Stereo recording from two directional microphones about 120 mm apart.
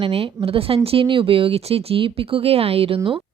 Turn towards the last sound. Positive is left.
turn(degrees=-50)  # may be behind; listen again after turning